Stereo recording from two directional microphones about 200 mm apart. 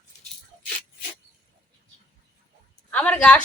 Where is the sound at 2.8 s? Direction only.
5° left (ahead or behind).